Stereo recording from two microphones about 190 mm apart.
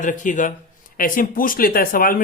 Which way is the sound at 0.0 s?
45° left (ahead or behind).